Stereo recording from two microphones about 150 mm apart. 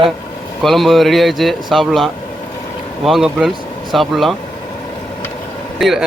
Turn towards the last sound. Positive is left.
turn(degrees=0)  # may be behind; listen again after turning